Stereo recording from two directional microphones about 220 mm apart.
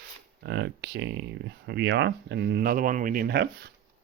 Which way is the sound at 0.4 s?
50° right (ahead or behind).